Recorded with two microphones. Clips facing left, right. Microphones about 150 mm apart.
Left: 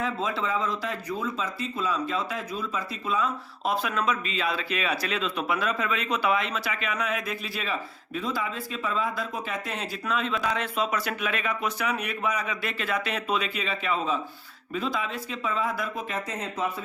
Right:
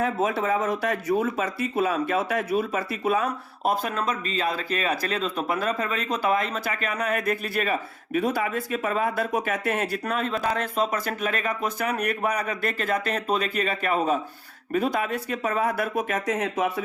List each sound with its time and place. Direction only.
0.0 s speech: 65° right (ahead or behind)